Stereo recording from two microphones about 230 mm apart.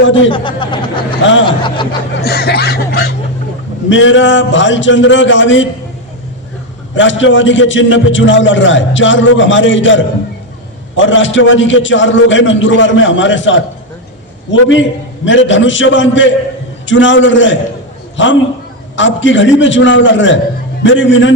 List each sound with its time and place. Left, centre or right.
0.0 s a man's voice: left
0.3 s speech: left
2.2 s speech: left
3.8 s a man's voice: left
6.9 s a man's voice: left